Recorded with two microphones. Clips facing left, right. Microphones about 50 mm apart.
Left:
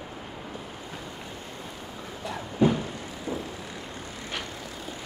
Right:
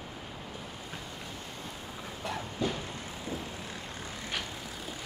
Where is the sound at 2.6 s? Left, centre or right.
Left.